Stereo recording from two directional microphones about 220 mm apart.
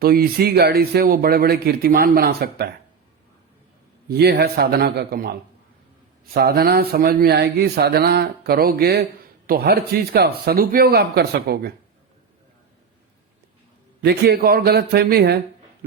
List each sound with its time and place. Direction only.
0.0 s speech: 45° right (ahead or behind)
4.1 s speech: 45° right (ahead or behind)
14.0 s speech: 45° right (ahead or behind)